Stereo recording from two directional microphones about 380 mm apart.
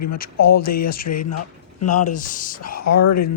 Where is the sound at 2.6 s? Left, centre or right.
Left.